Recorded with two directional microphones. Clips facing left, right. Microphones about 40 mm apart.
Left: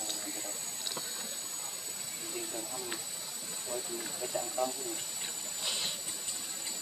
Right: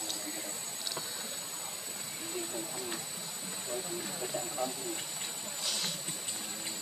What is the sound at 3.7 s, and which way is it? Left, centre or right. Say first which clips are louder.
Speech: even; right.